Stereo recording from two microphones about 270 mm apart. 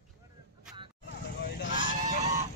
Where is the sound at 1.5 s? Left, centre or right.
Left.